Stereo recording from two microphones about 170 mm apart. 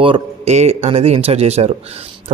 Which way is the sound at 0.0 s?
35° right (ahead or behind).